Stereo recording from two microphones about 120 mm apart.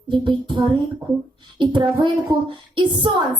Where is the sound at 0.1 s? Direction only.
40° right (ahead or behind).